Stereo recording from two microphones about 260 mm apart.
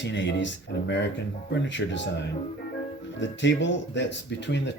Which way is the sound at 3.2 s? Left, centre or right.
Left.